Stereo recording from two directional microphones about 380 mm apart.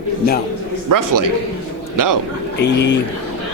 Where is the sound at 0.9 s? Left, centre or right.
Right.